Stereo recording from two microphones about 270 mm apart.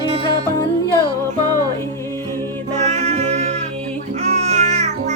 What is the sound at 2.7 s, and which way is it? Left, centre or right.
Music, right.